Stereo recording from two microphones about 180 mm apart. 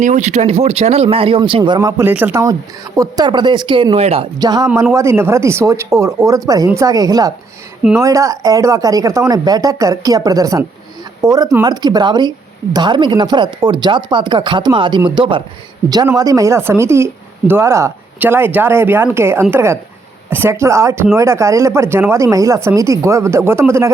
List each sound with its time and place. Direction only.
0.0 s speech: 40° right (ahead or behind); by 1.9 s 25° right (ahead or behind)
1.9 s speech: 10° right (ahead or behind); by 4.3 s 35° right (ahead or behind)
4.4 s speech: 20° right (ahead or behind)